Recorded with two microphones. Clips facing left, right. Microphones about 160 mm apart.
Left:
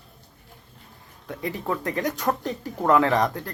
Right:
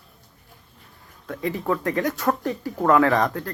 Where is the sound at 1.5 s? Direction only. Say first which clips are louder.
Right 4 dB; 20° left (ahead or behind).